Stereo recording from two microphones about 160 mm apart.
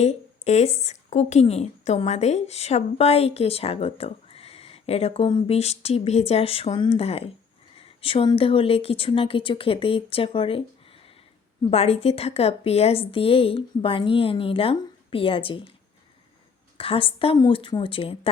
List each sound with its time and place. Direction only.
0.0 s a woman's voice: 45° left (ahead or behind)
16.7 s a woman's voice: 35° left (ahead or behind)